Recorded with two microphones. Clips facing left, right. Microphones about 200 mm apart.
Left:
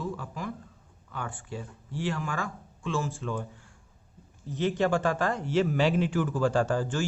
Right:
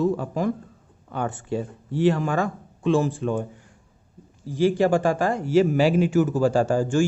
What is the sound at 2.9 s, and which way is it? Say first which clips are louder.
Speech: right 10 dB; 60° right (ahead or behind).